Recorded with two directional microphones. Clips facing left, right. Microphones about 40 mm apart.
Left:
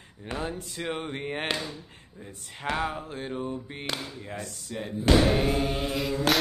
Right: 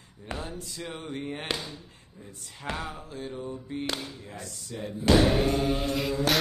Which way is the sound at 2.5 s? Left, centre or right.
Left.